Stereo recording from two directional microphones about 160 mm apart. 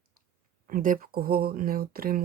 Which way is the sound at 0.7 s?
60° right (ahead or behind).